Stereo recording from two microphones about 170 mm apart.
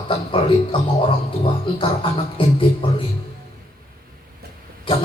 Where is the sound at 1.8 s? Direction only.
30° left (ahead or behind).